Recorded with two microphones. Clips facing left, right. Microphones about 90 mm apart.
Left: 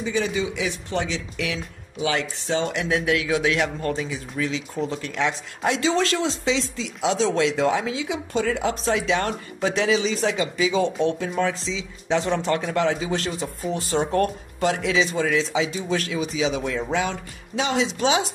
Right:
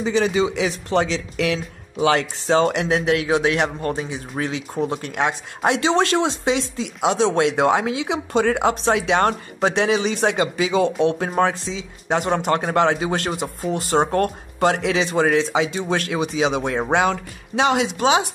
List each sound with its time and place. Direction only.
0.1 s speech: 80° right
0.8 s speech: 70° right (ahead or behind)
2.9 s speech: 30° right (ahead or behind)
4.4 s speech: 55° right (ahead or behind)
11.1 s speech: 50° right (ahead or behind)
14.6 s speech: 60° right (ahead or behind)